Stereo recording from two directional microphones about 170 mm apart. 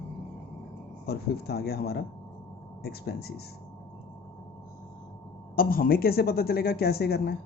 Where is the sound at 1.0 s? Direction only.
70° left (ahead or behind).